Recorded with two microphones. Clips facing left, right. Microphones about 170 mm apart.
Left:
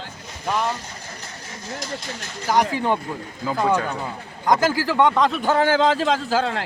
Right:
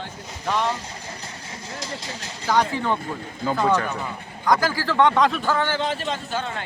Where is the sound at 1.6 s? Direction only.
30° right (ahead or behind).